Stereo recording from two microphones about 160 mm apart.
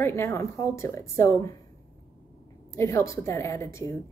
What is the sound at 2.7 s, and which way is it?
A woman's voice, 15° left (ahead or behind).